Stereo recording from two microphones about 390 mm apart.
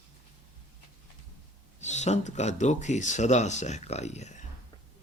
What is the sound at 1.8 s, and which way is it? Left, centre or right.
Speech, centre.